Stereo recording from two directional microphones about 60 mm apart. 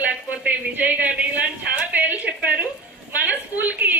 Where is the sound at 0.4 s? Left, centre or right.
Right.